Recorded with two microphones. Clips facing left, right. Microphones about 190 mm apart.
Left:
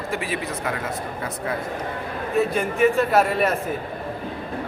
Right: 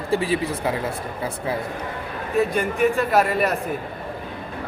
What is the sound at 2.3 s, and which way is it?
Speech, centre (ahead or behind).